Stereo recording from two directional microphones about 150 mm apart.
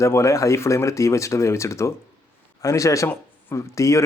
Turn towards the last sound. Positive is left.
turn(degrees=20)  # may be behind; listen again after turning